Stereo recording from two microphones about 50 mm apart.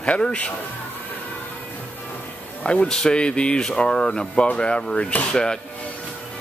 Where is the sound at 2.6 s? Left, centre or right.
Left.